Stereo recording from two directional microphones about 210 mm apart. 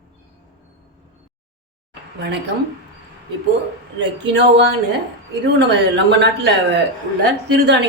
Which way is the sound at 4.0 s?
55° right (ahead or behind).